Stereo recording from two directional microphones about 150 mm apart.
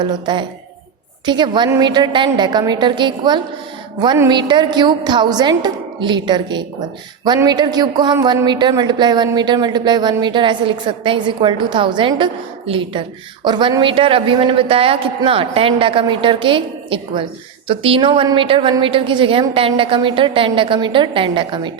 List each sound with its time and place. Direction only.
0.0 s a woman's voice: 30° right (ahead or behind)